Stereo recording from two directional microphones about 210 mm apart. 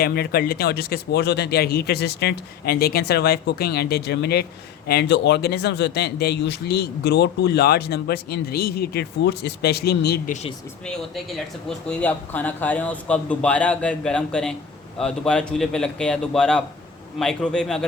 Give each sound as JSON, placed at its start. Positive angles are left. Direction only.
{"t": 0.0, "sound": "speech", "side_deg": 45}
{"t": 10.8, "sound": "speech", "side_deg": 0}